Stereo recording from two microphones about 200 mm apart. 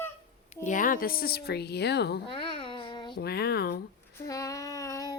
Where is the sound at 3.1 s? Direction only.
50° left (ahead or behind).